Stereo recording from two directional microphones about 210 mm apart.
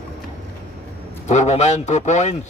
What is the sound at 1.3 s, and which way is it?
A man's voice, 35° left (ahead or behind).